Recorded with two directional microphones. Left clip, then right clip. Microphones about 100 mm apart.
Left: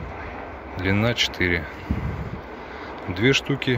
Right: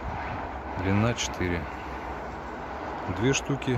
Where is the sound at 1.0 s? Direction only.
15° left (ahead or behind).